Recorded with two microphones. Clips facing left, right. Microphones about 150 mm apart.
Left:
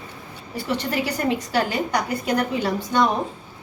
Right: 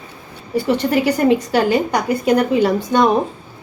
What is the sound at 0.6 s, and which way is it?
A woman's voice, 60° right (ahead or behind).